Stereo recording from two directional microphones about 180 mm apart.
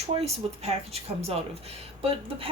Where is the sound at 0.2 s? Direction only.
35° right (ahead or behind).